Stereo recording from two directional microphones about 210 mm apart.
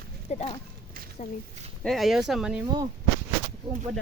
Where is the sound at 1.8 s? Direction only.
Centre (ahead or behind).